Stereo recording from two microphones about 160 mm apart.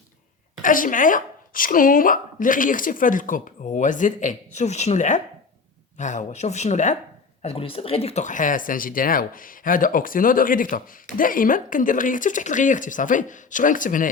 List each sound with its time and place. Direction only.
0.6 s speech: 55° left (ahead or behind)